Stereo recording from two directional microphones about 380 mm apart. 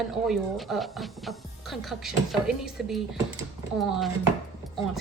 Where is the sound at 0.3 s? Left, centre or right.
Centre.